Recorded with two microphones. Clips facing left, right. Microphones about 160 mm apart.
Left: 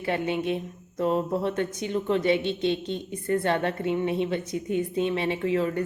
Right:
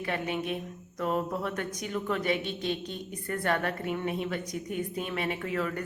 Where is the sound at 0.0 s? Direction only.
30° left (ahead or behind).